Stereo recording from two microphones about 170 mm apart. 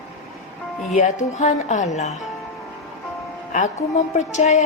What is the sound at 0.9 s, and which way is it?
A woman's voice, 45° left (ahead or behind).